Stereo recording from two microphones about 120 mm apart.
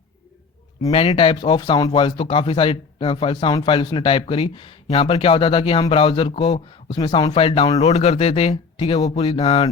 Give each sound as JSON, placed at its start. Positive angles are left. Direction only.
{"t": 0.9, "sound": "speech", "side_deg": 50}
{"t": 7.3, "sound": "speech", "side_deg": 50}